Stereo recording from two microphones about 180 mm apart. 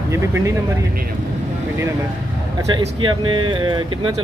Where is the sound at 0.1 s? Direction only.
15° right (ahead or behind).